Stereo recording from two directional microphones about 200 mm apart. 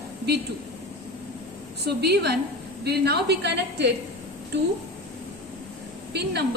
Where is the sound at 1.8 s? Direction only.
55° right (ahead or behind).